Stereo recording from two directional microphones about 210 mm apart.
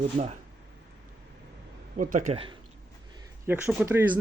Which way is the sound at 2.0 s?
40° right (ahead or behind).